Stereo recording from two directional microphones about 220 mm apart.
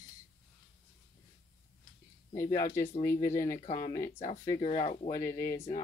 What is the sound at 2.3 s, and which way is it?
Speech, 10° left (ahead or behind).